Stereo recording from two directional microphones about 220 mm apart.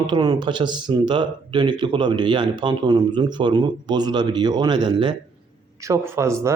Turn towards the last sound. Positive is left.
turn(degrees=-15)  # may be behind; listen again after turning